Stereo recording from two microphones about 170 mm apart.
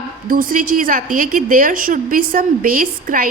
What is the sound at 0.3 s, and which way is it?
A woman's voice, 55° right (ahead or behind).